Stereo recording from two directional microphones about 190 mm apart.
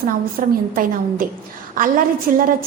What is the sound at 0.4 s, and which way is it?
Speech, 50° right (ahead or behind).